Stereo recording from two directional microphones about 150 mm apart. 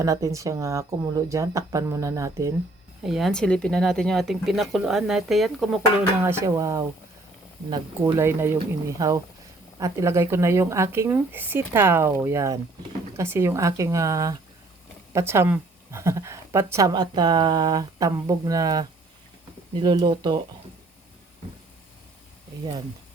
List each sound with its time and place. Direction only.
0.0 s speech: 20° right (ahead or behind)
3.0 s speech: centre (ahead or behind)
6.1 s speech: 15° right (ahead or behind)
8.0 s a woman's voice: 15° right (ahead or behind)
16.9 s speech: 30° right (ahead or behind)